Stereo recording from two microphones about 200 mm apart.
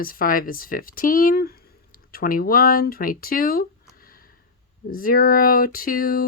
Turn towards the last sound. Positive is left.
turn(degrees=45)  # may be behind; listen again after turning